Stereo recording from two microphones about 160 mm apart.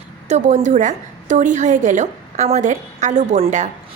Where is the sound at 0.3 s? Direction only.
45° right (ahead or behind).